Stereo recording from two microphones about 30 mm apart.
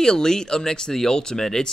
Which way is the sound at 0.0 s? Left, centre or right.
Left.